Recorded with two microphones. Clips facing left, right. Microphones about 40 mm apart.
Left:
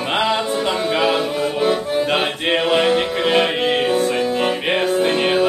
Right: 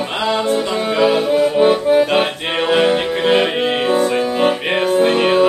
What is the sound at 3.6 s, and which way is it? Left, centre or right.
Music, centre.